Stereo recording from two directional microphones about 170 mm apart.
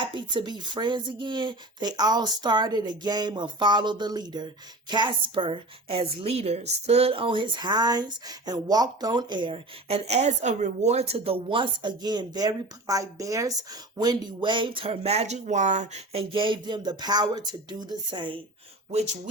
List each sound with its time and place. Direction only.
0.2 s a woman's voice: 25° right (ahead or behind)
18.9 s speech: 40° right (ahead or behind)